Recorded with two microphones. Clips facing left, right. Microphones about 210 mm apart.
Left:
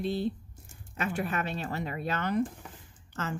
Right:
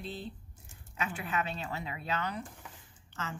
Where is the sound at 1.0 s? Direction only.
50° left (ahead or behind).